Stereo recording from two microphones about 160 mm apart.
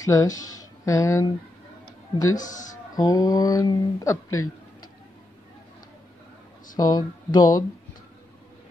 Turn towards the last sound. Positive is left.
turn(degrees=25)  # may be behind; listen again after turning